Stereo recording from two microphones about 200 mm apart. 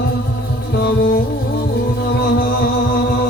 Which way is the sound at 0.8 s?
55° left (ahead or behind).